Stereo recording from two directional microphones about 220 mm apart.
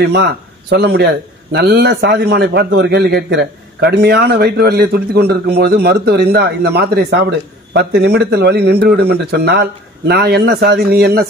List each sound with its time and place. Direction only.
0.0 s a man's voice: 50° right (ahead or behind)